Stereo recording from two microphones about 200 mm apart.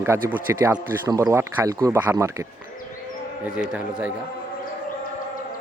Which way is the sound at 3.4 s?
5° right (ahead or behind).